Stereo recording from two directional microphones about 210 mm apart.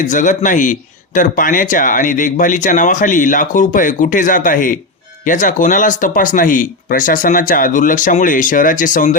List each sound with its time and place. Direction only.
0.1 s speech: 35° left (ahead or behind)